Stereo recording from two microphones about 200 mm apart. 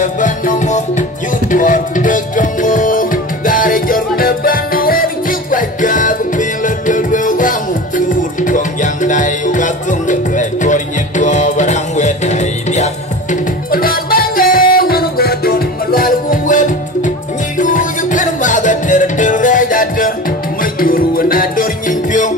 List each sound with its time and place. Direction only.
0.0 s music: 40° left (ahead or behind)